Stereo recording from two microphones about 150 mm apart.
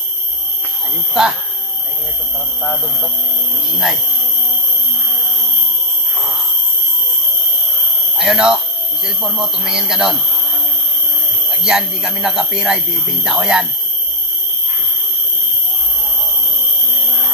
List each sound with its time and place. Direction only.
1.2 s speech: 5° right (ahead or behind)
2.6 s a sound: 15° left (ahead or behind)
3.7 s speech: centre (ahead or behind)
8.2 s speech: 5° right (ahead or behind)
11.6 s speech: 5° right (ahead or behind)